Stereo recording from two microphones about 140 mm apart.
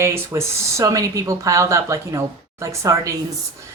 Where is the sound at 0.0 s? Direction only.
20° right (ahead or behind).